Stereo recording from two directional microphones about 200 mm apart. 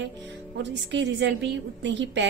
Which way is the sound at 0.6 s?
60° right (ahead or behind).